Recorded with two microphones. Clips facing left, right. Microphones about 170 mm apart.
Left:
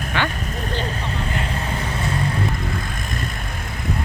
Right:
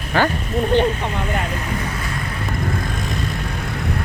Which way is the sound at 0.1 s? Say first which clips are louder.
Right 6 dB; 40° right (ahead or behind).